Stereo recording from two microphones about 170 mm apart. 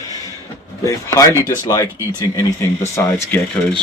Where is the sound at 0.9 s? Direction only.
20° left (ahead or behind).